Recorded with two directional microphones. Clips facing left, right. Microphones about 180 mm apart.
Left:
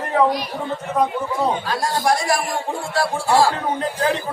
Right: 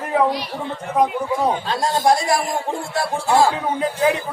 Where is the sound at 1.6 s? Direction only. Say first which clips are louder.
Right 2 dB; 25° right (ahead or behind).